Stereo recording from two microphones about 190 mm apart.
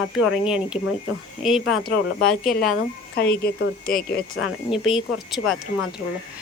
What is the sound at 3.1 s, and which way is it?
Speech, 55° left (ahead or behind).